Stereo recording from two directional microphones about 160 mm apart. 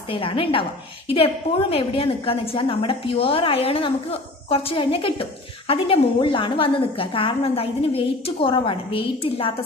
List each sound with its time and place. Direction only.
0.1 s a woman's voice: 35° left (ahead or behind)